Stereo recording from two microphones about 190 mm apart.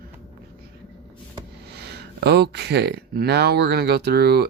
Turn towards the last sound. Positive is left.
turn(degrees=-55)  # may be behind; listen again after turning